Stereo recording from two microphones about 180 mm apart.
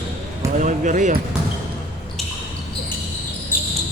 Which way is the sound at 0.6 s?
45° right (ahead or behind).